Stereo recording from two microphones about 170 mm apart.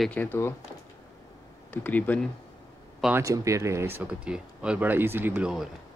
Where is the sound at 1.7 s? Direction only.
10° left (ahead or behind).